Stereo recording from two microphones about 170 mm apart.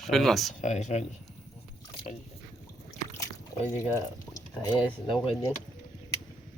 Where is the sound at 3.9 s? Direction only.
20° left (ahead or behind).